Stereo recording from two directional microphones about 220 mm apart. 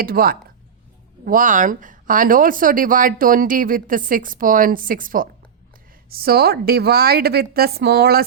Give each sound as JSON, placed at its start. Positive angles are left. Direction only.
{"t": 0.0, "sound": "a woman's voice", "side_deg": -40}